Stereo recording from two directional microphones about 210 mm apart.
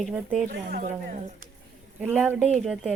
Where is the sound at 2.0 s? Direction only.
10° right (ahead or behind).